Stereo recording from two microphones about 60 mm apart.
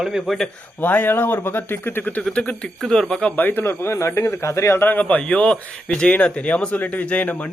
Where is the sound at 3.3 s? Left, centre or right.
Left.